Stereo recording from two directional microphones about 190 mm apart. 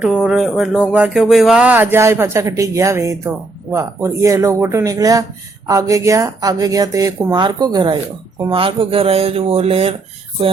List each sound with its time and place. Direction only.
0.0 s speech: 5° right (ahead or behind); by 9.9 s 30° right (ahead or behind)